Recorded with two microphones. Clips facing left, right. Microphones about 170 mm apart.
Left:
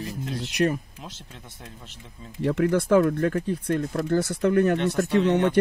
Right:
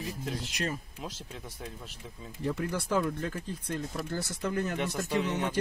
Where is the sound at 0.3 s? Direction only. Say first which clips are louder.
Left 11 dB; 65° left (ahead or behind).